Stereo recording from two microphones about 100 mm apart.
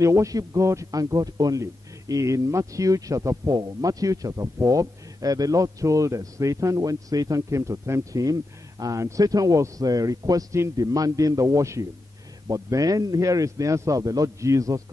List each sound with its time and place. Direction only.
0.0 s speech: 30° right (ahead or behind)